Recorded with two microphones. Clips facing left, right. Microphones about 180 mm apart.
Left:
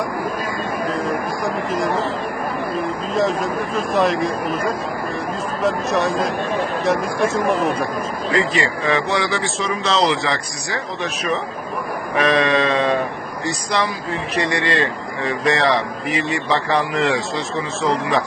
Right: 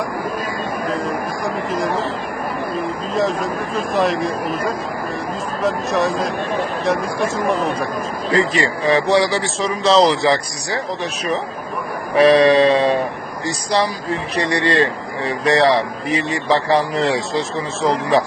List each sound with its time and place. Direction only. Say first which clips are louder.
0.9 s a sound: even; centre (ahead or behind)
2.7 s speech: even; centre (ahead or behind)
8.3 s speech: right 2 dB; 35° right (ahead or behind)